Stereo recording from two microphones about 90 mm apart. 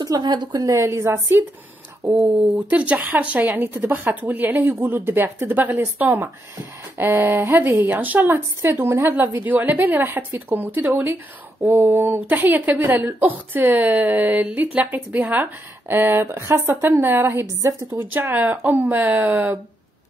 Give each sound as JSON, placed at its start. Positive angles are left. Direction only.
{"t": 0.0, "sound": "a woman's voice", "side_deg": -50}
{"t": 2.7, "sound": "a woman's voice", "side_deg": -15}